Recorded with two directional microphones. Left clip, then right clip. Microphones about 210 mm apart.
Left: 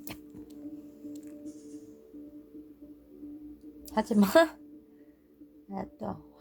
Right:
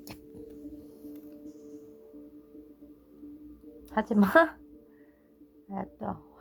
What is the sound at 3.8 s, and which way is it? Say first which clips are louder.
Speech: right 1 dB; 5° left (ahead or behind).